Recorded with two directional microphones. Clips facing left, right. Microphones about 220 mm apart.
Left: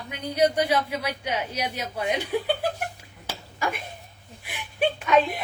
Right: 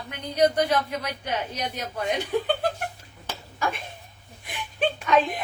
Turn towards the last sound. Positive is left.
turn(degrees=10)  # may be behind; listen again after turning